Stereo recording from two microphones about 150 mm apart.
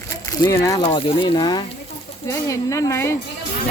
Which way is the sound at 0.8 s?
40° left (ahead or behind).